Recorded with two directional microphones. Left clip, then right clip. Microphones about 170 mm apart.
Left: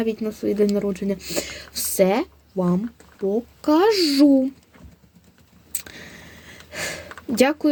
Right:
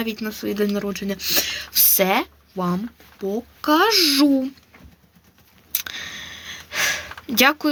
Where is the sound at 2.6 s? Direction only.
40° right (ahead or behind).